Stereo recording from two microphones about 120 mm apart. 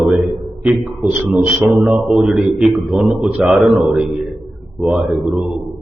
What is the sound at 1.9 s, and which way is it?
A man's voice, 5° right (ahead or behind).